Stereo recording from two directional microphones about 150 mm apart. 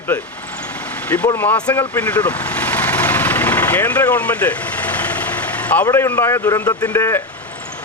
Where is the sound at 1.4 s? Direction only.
10° left (ahead or behind).